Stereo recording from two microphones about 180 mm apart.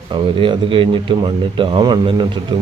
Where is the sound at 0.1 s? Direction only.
25° right (ahead or behind).